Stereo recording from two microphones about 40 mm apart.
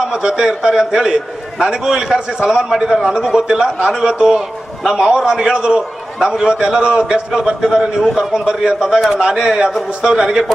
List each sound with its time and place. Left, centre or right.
0.1 s a man's voice: right